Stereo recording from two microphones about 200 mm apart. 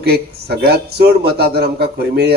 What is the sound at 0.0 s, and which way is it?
A man's voice, 55° right (ahead or behind).